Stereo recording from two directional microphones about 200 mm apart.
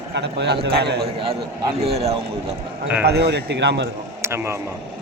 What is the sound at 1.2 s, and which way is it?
Speech, 30° right (ahead or behind).